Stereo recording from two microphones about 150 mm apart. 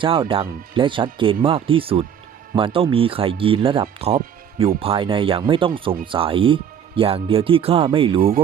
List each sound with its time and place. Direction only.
0.0 s speech: 35° right (ahead or behind)